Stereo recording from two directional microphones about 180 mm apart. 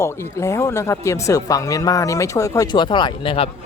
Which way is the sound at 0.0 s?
15° left (ahead or behind).